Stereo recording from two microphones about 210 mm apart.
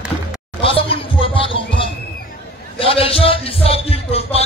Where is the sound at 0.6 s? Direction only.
25° left (ahead or behind).